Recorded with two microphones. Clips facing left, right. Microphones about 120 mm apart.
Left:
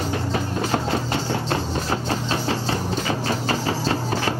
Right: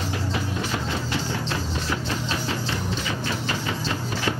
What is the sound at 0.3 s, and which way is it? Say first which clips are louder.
Music: left 5 dB; 40° left (ahead or behind).